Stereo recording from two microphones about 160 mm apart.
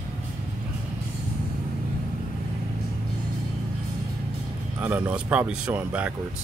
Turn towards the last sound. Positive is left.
turn(degrees=-10)  # may be behind; listen again after turning